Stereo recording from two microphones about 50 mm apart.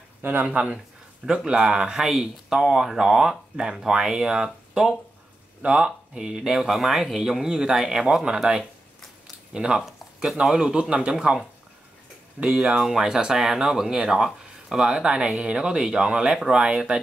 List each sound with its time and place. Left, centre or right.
0.2 s speech: right
0.5 s speech: right
5.6 s speech: centre
12.4 s speech: centre
16.5 s speech: centre